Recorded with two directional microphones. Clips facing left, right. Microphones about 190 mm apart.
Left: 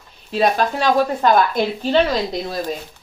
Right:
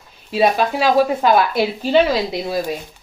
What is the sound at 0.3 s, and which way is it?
Speech, 5° right (ahead or behind).